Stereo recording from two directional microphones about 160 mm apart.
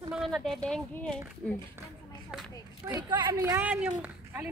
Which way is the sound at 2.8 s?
20° right (ahead or behind).